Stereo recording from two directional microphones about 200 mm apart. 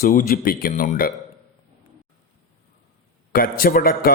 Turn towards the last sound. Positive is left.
turn(degrees=45)  # may be behind; listen again after turning